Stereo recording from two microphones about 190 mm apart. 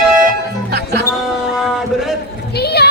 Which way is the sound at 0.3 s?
60° right (ahead or behind).